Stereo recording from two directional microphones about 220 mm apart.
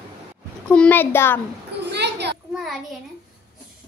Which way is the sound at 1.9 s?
50° right (ahead or behind).